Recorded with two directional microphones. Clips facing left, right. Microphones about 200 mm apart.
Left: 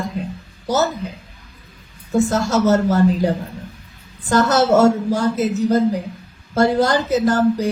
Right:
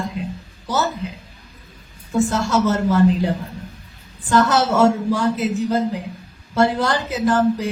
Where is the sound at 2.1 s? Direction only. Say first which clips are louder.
Left 2 dB; 40° left (ahead or behind).